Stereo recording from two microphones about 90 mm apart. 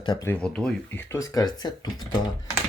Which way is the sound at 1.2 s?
40° left (ahead or behind).